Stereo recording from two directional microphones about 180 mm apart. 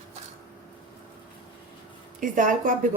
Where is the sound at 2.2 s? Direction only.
45° right (ahead or behind).